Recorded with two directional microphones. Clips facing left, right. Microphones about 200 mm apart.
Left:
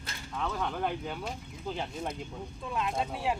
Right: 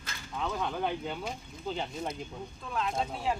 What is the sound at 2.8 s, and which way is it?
Speech, 10° left (ahead or behind).